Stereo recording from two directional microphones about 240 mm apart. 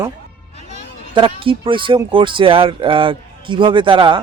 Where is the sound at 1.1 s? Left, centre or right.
Right.